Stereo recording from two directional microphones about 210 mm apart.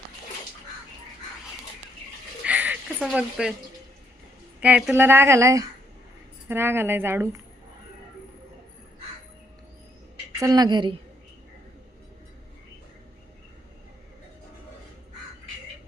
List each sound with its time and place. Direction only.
2.4 s a sound: 5° right (ahead or behind)
4.6 s a woman's voice: 5° right (ahead or behind)
10.4 s a woman's voice: 20° right (ahead or behind)